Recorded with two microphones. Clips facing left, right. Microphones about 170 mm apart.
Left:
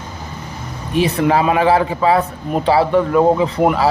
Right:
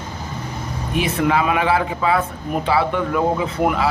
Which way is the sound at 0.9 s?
35° left (ahead or behind).